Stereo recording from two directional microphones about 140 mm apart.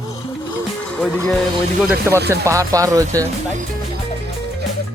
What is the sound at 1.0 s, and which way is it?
Speech, 5° left (ahead or behind).